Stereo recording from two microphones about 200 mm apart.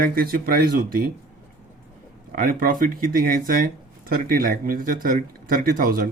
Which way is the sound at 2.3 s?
45° right (ahead or behind).